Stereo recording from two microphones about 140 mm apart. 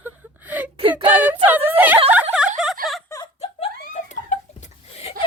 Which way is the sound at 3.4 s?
55° left (ahead or behind).